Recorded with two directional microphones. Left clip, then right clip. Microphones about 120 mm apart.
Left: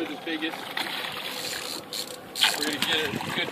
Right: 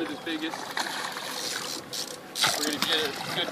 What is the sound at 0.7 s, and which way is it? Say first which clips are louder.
Boat: right 2 dB; 5° right (ahead or behind).